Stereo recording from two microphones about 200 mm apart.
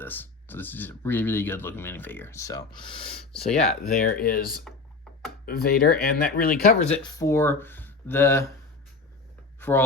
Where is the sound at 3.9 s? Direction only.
45° left (ahead or behind).